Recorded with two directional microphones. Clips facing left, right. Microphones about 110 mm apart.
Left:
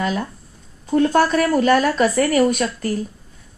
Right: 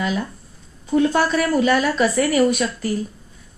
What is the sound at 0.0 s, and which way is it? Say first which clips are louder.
A woman's voice: left 1 dB; 45° left (ahead or behind).